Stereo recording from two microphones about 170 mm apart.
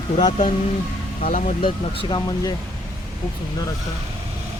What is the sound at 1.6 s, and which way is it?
Speech, 30° left (ahead or behind).